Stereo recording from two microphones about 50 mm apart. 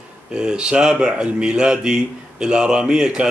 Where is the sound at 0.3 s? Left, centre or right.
Centre.